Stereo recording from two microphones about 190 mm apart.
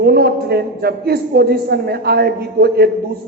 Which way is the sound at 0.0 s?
55° right (ahead or behind).